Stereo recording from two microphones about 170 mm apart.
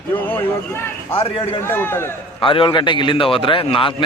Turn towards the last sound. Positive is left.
turn(degrees=30)  # may be behind; listen again after turning